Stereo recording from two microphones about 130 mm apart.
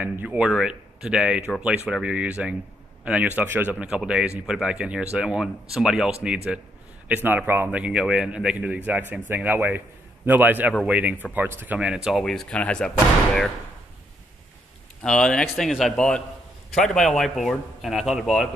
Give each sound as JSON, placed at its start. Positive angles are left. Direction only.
{"t": 0.0, "sound": "a man's voice", "side_deg": -10}
{"t": 15.0, "sound": "speech", "side_deg": 5}